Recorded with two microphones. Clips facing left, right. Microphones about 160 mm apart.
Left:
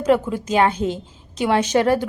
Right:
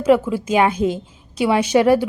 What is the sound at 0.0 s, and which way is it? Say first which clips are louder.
A woman's voice: right 3 dB; 10° right (ahead or behind).